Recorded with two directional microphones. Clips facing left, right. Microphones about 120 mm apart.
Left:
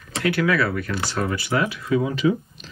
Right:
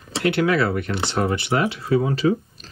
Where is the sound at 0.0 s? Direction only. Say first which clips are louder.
Right 2 dB; 25° right (ahead or behind).